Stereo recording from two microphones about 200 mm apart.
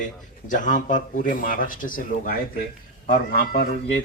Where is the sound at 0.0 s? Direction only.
40° left (ahead or behind).